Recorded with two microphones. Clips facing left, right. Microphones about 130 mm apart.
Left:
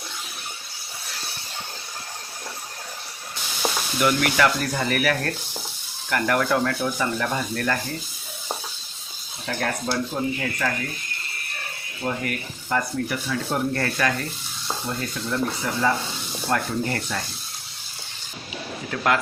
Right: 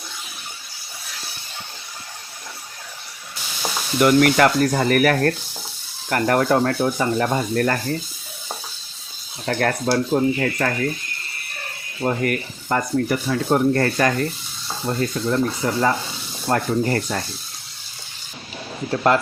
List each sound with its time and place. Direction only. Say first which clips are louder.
4.0 s speech: right 6 dB; 45° right (ahead or behind)
9.5 s speech: right 6 dB; 60° right (ahead or behind)
12.0 s speech: right 6 dB; 50° right (ahead or behind)
18.9 s speech: right 5 dB; 30° right (ahead or behind)